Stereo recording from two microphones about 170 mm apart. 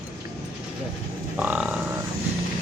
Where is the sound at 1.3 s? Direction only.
5° right (ahead or behind).